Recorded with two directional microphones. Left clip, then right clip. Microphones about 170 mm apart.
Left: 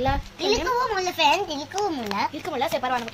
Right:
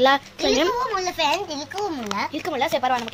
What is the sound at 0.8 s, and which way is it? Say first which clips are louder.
A child's voice: left 1 dB; 5° left (ahead or behind).